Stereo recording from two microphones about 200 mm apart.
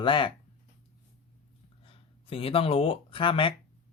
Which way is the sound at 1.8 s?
25° left (ahead or behind).